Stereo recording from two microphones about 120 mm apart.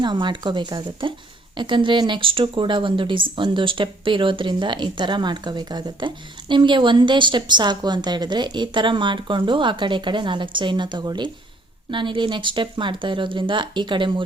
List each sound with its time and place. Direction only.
0.0 s speech: 40° right (ahead or behind)